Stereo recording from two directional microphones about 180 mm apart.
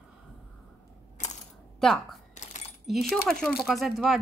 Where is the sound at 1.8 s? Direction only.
Centre (ahead or behind).